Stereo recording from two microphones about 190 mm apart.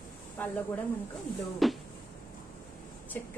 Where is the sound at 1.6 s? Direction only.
Centre (ahead or behind).